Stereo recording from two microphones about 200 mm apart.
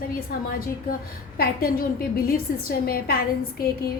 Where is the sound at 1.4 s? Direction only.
50° left (ahead or behind).